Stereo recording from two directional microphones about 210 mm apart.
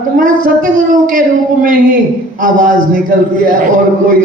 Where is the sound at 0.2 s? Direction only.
40° right (ahead or behind).